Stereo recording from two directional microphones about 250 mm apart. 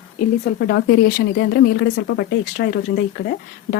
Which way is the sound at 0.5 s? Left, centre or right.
Left.